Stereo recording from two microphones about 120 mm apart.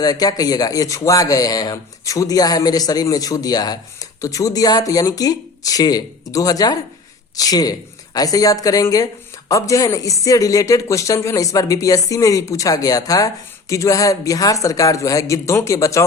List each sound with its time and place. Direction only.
0.0 s speech: 30° left (ahead or behind)